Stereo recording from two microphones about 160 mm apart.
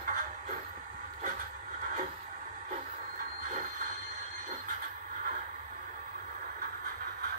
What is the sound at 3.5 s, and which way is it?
Train wheels squealing, 55° right (ahead or behind).